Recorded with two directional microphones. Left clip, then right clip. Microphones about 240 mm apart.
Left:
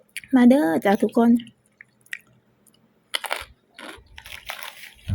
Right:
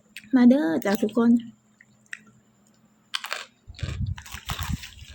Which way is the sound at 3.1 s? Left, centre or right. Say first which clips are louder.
Left 4 dB; centre.